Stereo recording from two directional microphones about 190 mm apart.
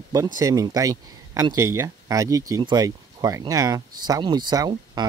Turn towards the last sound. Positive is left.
turn(degrees=-20)  # may be behind; listen again after turning